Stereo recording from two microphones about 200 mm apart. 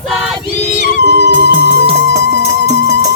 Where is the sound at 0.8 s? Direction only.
60° right (ahead or behind).